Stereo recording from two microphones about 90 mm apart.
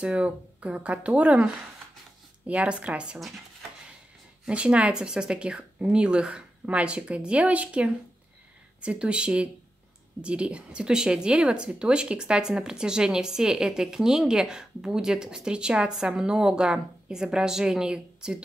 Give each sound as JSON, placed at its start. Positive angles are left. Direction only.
{"t": 0.0, "sound": "speech", "side_deg": -15}
{"t": 4.5, "sound": "speech", "side_deg": -15}